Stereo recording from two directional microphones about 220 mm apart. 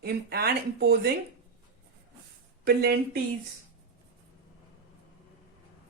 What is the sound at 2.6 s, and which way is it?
Speech, 45° right (ahead or behind).